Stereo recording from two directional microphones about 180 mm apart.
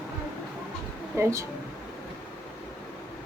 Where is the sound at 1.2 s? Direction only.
15° right (ahead or behind).